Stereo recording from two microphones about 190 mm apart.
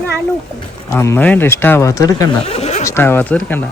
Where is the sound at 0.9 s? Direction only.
15° left (ahead or behind).